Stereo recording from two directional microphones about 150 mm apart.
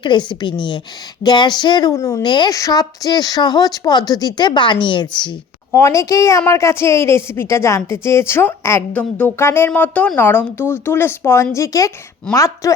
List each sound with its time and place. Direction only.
0.0 s a woman's voice: 30° left (ahead or behind)
5.7 s a woman's voice: 20° left (ahead or behind)